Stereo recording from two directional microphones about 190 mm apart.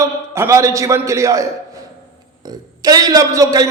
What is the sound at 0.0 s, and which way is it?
A man's voice, 15° right (ahead or behind).